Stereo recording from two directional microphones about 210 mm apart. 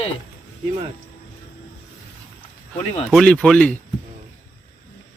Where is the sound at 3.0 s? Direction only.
5° left (ahead or behind).